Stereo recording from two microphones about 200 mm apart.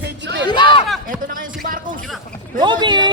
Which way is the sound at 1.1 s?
45° right (ahead or behind).